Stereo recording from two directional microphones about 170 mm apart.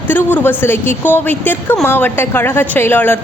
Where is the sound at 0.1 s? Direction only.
10° left (ahead or behind).